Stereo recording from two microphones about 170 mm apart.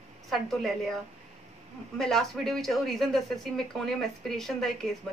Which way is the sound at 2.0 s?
Centre (ahead or behind).